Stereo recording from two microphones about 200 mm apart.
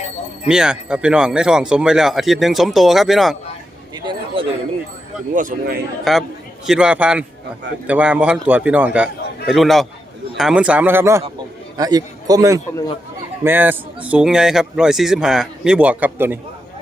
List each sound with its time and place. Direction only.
0.4 s speech: 5° right (ahead or behind)
3.9 s a sound: 25° right (ahead or behind)
5.3 s speech: 40° right (ahead or behind)
6.1 s a man's voice: centre (ahead or behind)